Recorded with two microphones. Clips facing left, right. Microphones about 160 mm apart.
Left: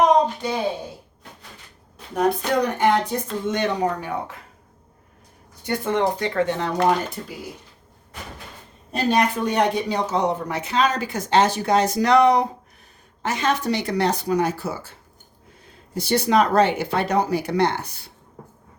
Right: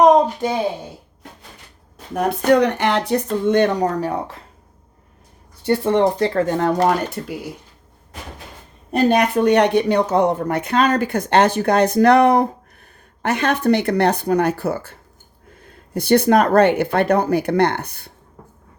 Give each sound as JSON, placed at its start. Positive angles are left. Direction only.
{"t": 2.1, "sound": "speech", "side_deg": -70}
{"t": 3.2, "sound": "speech", "side_deg": -55}
{"t": 4.0, "sound": "speech", "side_deg": -35}
{"t": 5.6, "sound": "speech", "side_deg": -30}
{"t": 8.9, "sound": "speech", "side_deg": -55}